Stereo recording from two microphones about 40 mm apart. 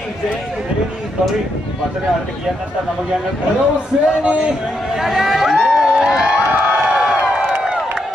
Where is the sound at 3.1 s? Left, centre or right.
Right.